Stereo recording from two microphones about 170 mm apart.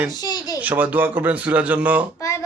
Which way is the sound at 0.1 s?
25° left (ahead or behind).